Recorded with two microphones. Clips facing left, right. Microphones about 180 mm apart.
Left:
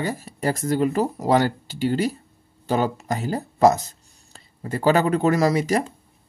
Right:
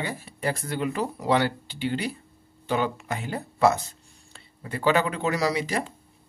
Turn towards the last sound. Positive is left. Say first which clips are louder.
# left 6 dB
turn(degrees=45)  # may be behind; listen again after turning